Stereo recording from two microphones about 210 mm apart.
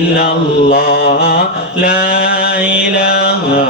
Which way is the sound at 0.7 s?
45° left (ahead or behind).